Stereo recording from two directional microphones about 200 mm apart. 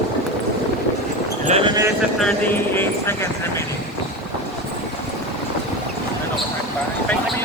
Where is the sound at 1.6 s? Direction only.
20° right (ahead or behind).